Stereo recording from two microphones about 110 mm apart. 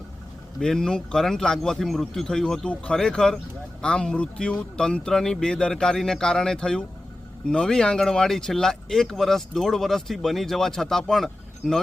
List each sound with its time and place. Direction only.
0.6 s a man's voice: 5° left (ahead or behind)